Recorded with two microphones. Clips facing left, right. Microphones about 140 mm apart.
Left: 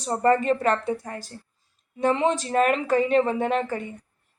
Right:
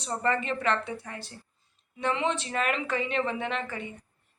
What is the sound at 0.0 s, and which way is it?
A woman's voice, 40° left (ahead or behind).